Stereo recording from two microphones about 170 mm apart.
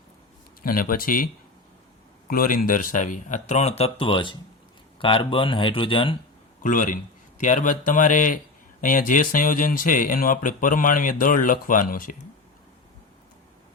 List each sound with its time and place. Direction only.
0.6 s speech: 55° left (ahead or behind); by 6.1 s 30° left (ahead or behind)
6.6 s speech: 50° left (ahead or behind)